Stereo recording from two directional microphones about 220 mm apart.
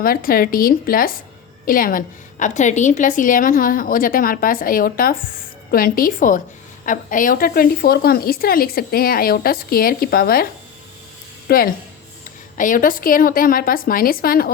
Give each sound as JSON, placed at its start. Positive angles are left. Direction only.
{"t": 0.0, "sound": "a woman's voice", "side_deg": 40}
{"t": 11.4, "sound": "a woman's voice", "side_deg": 40}